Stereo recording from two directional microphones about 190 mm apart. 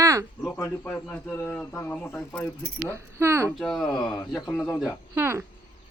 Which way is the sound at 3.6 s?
Centre (ahead or behind).